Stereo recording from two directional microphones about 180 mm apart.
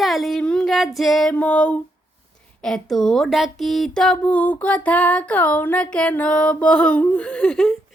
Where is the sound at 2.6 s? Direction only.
Centre (ahead or behind).